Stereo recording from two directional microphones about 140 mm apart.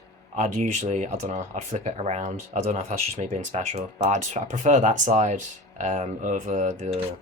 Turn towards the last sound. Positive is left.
turn(degrees=-60)  # may be behind; listen again after turning